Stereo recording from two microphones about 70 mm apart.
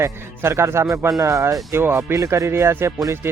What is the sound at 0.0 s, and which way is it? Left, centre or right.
Speech, right.